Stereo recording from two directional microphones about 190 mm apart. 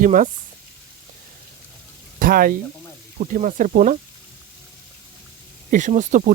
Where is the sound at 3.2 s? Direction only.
45° right (ahead or behind).